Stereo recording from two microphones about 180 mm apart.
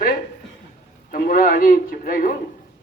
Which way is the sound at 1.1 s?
50° left (ahead or behind).